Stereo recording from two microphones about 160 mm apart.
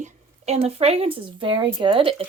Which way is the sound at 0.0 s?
45° right (ahead or behind).